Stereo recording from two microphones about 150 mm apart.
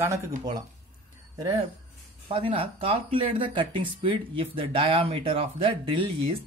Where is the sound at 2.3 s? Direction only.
35° right (ahead or behind).